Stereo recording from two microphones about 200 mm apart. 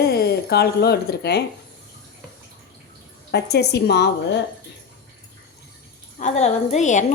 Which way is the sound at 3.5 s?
55° left (ahead or behind).